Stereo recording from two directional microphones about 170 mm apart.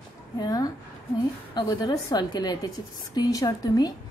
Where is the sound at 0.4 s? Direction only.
20° left (ahead or behind).